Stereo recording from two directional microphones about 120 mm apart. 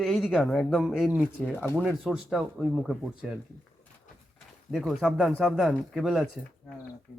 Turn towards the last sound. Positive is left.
turn(degrees=0)  # may be behind; listen again after turning